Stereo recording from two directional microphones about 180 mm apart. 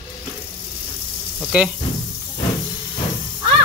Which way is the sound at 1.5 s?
5° right (ahead or behind).